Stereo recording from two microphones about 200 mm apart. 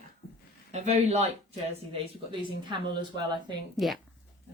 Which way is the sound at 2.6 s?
25° right (ahead or behind).